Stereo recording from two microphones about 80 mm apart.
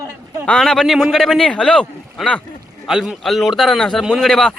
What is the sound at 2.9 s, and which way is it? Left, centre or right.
A man's voice, centre.